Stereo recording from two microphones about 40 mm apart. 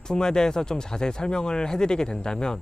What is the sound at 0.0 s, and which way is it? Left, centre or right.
Speech, centre.